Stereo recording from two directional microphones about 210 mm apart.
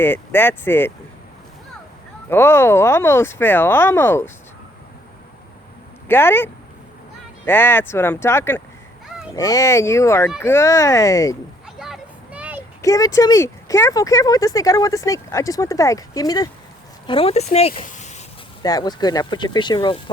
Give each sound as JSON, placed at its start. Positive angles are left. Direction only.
{"t": 0.0, "sound": "speech", "side_deg": 10}
{"t": 2.3, "sound": "speech", "side_deg": 10}
{"t": 6.1, "sound": "speech", "side_deg": 10}
{"t": 11.8, "sound": "a sound", "side_deg": -5}
{"t": 12.8, "sound": "speech", "side_deg": 15}
{"t": 18.6, "sound": "speech", "side_deg": 20}